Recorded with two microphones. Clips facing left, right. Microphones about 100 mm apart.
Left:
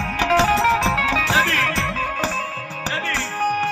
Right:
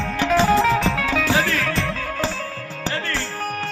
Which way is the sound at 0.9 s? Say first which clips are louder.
Left 1 dB; 70° left (ahead or behind).